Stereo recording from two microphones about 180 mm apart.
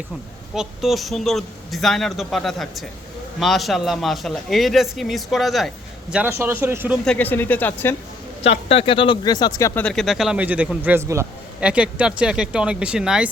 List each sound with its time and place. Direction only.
0.5 s a man's voice: centre (ahead or behind)
7.0 s speech: 5° left (ahead or behind)
8.4 s speech: 35° left (ahead or behind); by 9.8 s 15° left (ahead or behind)
9.8 s a man's voice: centre (ahead or behind)